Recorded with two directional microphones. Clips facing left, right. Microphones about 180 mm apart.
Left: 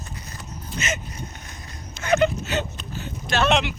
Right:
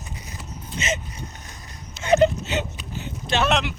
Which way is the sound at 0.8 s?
30° right (ahead or behind).